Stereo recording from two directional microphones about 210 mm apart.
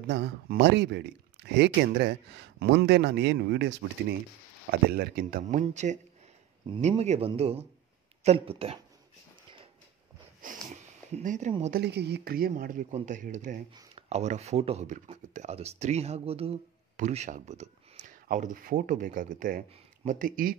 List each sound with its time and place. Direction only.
0.0 s speech: 55° right (ahead or behind); by 8.7 s 25° right (ahead or behind)
10.4 s sniff: 35° right (ahead or behind)
11.7 s speech: 55° right (ahead or behind)